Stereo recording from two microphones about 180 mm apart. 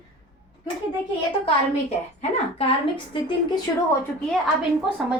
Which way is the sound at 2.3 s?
35° left (ahead or behind).